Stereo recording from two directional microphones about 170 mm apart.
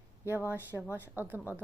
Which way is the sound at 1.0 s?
10° right (ahead or behind).